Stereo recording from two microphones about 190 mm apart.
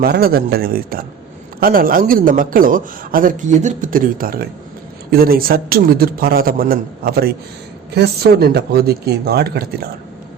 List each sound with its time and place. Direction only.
0.0 s speech: 55° right (ahead or behind)